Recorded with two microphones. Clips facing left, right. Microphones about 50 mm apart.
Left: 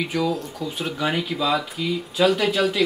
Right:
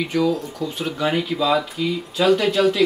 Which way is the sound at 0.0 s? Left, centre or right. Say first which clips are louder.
Right 3 dB; centre.